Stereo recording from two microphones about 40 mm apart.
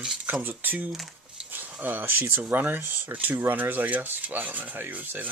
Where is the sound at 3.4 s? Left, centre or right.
Right.